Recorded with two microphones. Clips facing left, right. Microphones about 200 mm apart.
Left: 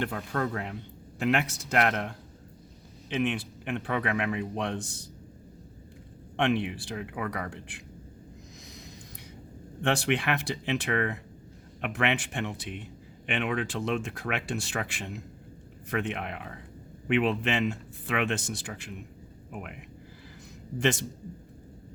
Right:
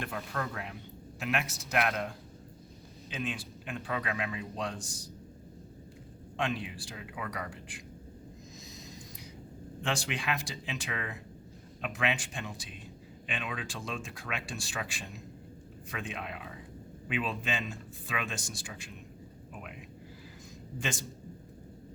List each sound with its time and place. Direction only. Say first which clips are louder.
0.0 s a man's voice: left 6 dB; 55° left (ahead or behind)
6.3 s a man's voice: left 7 dB; 65° left (ahead or behind)
9.8 s a man's voice: left 7 dB; 60° left (ahead or behind)